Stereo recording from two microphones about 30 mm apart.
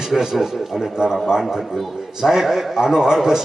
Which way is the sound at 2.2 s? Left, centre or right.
Centre.